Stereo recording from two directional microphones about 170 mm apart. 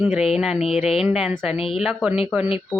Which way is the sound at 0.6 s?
35° left (ahead or behind).